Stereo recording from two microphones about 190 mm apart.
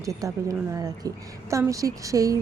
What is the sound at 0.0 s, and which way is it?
Speech, 15° right (ahead or behind).